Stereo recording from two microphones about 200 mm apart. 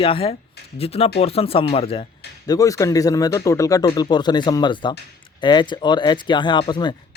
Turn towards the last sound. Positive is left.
turn(degrees=20)  # may be behind; listen again after turning